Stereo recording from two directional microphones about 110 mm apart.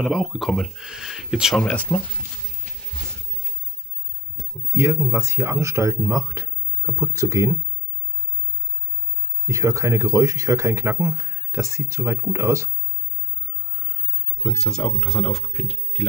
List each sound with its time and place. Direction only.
0.0 s speech: 5° right (ahead or behind)
1.6 s speech: 10° left (ahead or behind)
4.7 s speech: 20° right (ahead or behind)
9.5 s speech: 30° right (ahead or behind)
13.7 s a sound: 25° right (ahead or behind)
14.4 s speech: centre (ahead or behind)